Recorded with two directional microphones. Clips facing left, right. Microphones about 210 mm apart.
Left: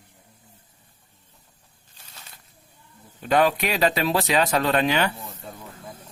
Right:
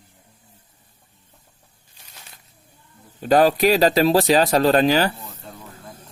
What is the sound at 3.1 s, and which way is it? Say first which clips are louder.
Speech: right 5 dB; 35° right (ahead or behind).